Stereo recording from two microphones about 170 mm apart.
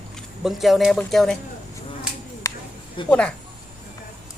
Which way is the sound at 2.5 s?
20° left (ahead or behind).